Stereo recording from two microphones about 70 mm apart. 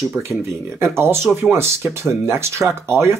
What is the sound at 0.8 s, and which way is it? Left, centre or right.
Speech, right.